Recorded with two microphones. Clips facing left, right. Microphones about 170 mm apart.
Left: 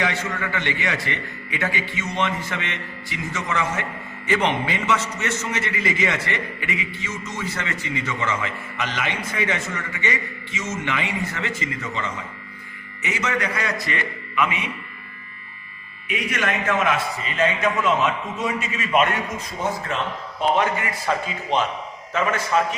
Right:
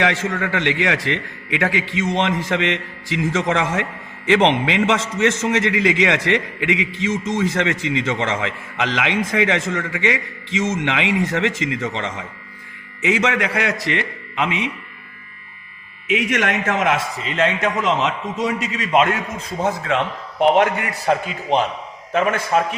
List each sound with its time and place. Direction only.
0.0 s a man's voice: 90° right
16.0 s a man's voice: 90° right; by 18.9 s 75° right (ahead or behind)
20.4 s a man's voice: 70° right (ahead or behind)
22.1 s a man's voice: 55° right (ahead or behind)